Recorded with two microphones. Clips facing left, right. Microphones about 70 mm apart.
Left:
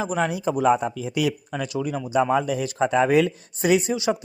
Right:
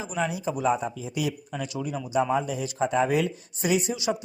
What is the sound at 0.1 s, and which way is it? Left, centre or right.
Speech, left.